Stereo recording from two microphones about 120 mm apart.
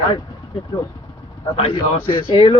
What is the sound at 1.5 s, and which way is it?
Speech, 50° left (ahead or behind).